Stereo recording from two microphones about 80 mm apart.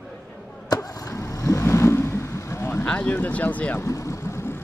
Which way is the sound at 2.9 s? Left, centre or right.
Centre.